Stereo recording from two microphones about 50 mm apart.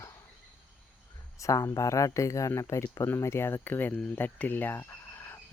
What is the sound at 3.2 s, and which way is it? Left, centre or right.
Speech, left.